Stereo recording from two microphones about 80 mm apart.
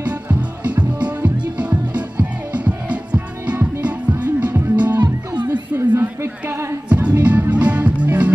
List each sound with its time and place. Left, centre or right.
0.0 s music: centre
5.0 s music: right
5.8 s a sound: right
6.9 s music: centre